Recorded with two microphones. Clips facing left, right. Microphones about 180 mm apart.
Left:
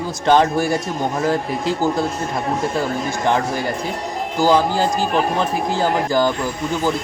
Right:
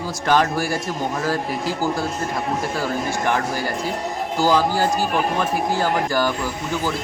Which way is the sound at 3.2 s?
25° left (ahead or behind).